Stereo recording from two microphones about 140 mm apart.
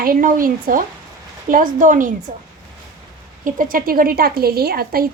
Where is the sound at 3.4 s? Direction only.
75° right (ahead or behind).